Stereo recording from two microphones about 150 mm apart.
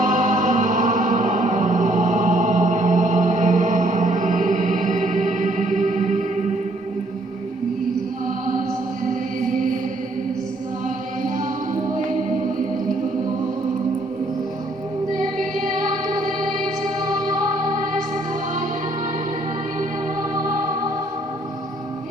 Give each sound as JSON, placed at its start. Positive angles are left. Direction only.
{"t": 0.0, "sound": "music", "side_deg": -60}
{"t": 9.0, "sound": "music", "side_deg": -60}
{"t": 10.8, "sound": "music", "side_deg": -60}
{"t": 15.7, "sound": "music", "side_deg": -60}